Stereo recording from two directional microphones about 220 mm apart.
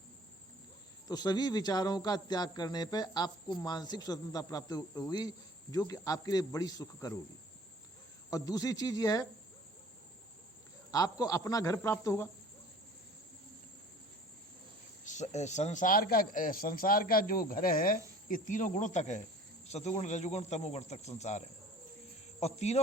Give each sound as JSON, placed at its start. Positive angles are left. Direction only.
{"t": 1.0, "sound": "speech", "side_deg": 20}
{"t": 8.3, "sound": "speech", "side_deg": 15}
{"t": 10.9, "sound": "speech", "side_deg": 15}
{"t": 15.0, "sound": "speech", "side_deg": 30}